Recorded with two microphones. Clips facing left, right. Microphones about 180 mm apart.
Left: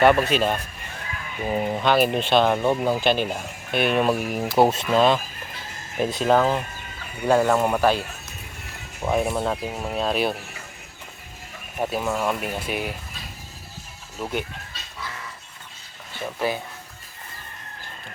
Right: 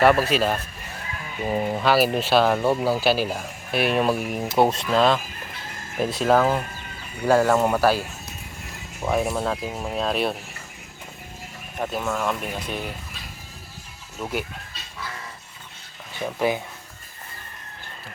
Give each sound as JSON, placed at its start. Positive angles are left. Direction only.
{"t": 0.0, "sound": "speech", "side_deg": 0}
{"t": 9.0, "sound": "speech", "side_deg": 0}
{"t": 11.8, "sound": "speech", "side_deg": 10}
{"t": 14.2, "sound": "speech", "side_deg": -5}
{"t": 16.2, "sound": "speech", "side_deg": -15}